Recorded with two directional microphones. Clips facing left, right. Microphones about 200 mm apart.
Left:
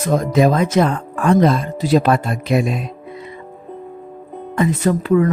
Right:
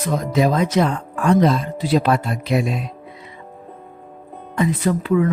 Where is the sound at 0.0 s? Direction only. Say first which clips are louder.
Left 4 dB; 50° left (ahead or behind).